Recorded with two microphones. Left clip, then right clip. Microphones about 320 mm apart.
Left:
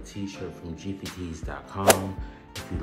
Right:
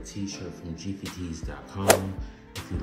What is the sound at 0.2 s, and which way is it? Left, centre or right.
Speech, left.